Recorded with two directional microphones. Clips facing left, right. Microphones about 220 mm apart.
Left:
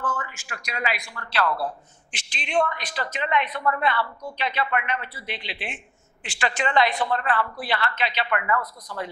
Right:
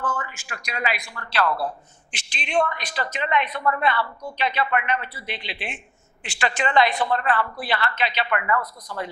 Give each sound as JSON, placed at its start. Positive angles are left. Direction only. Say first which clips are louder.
{"t": 0.0, "sound": "a woman's voice", "louder": "right 1 dB", "side_deg": -25}